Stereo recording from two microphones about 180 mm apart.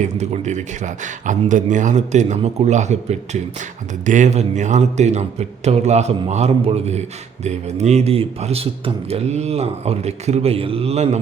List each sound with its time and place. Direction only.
0.0 s a man's voice: 40° right (ahead or behind)